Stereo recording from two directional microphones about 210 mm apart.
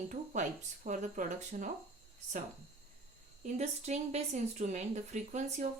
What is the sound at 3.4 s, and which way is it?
Speech, 35° right (ahead or behind).